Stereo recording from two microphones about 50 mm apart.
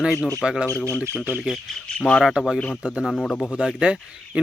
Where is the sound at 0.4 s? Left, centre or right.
Centre.